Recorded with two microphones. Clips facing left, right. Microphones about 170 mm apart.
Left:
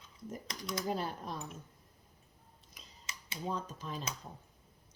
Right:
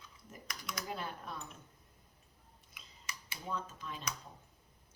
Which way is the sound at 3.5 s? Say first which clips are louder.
Left 2 dB; 35° left (ahead or behind).